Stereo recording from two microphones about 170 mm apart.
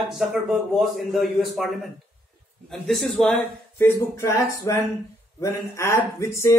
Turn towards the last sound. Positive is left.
turn(degrees=15)  # may be behind; listen again after turning